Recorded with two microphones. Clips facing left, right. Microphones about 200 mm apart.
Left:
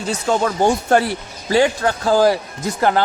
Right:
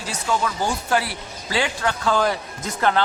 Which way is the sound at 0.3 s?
50° left (ahead or behind).